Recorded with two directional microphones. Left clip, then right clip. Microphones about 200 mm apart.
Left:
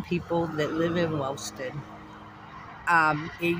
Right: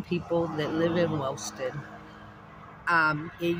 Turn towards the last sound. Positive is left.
turn(degrees=-25)  # may be behind; listen again after turning